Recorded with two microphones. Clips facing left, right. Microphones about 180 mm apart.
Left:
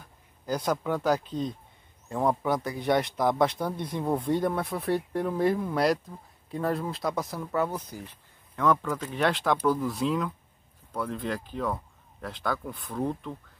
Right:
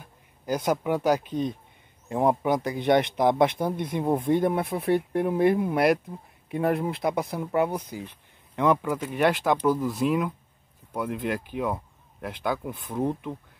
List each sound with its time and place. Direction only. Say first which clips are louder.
0.5 s speech: right 3 dB; 15° right (ahead or behind)
6.5 s speech: right 4 dB; 15° right (ahead or behind)